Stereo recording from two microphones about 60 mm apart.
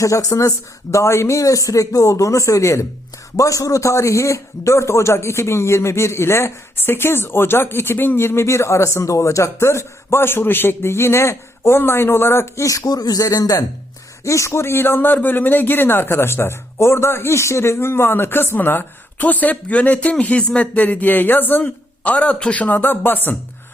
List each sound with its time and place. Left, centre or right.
0.0 s a man's voice: left
12.6 s speech: left
14.3 s a man's voice: left
21.6 s speech: left